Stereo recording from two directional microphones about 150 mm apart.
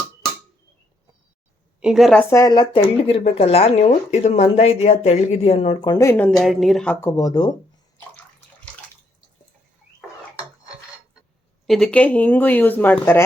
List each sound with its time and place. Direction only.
1.8 s a woman's voice: centre (ahead or behind)
2.1 s speech: 20° left (ahead or behind)
3.0 s speech: 40° left (ahead or behind)
5.8 s speech: 25° left (ahead or behind)
6.3 s a woman's voice: centre (ahead or behind)
6.9 s speech: 20° left (ahead or behind)
11.6 s speech: centre (ahead or behind)